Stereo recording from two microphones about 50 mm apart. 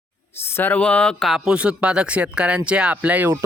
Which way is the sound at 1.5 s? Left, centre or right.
Right.